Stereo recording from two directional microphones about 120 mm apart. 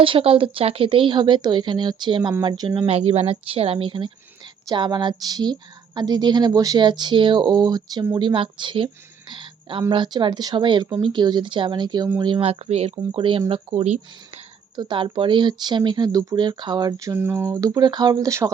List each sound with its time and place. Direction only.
0.0 s speech: 50° right (ahead or behind)
9.3 s a sound: 45° right (ahead or behind)
9.9 s speech: 40° right (ahead or behind)
12.5 s speech: 60° right (ahead or behind)
13.1 s speech: 45° right (ahead or behind); by 17.2 s 30° right (ahead or behind)
17.2 s speech: 20° right (ahead or behind)
17.6 s speech: 35° right (ahead or behind)